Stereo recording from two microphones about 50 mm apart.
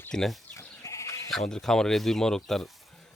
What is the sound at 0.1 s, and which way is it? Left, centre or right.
Speech, centre.